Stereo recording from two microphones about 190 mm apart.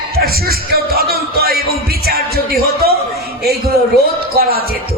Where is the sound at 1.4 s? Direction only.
55° right (ahead or behind).